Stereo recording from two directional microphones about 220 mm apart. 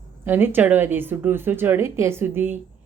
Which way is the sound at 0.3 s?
10° right (ahead or behind).